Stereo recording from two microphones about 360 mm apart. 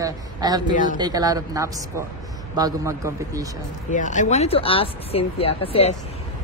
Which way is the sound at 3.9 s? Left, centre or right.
Left.